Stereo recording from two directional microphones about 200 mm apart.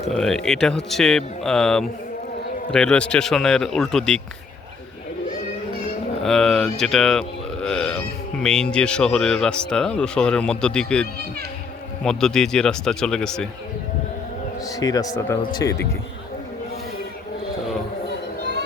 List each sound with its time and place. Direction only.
0.1 s speech: centre (ahead or behind)
6.2 s speech: centre (ahead or behind)
14.6 s a sound: 20° left (ahead or behind)
15.3 s speech: 15° left (ahead or behind)